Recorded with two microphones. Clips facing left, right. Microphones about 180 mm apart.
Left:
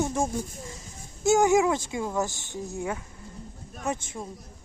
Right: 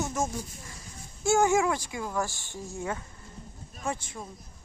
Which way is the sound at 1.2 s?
15° left (ahead or behind).